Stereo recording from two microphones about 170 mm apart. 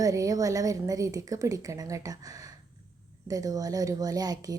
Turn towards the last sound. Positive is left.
turn(degrees=-20)  # may be behind; listen again after turning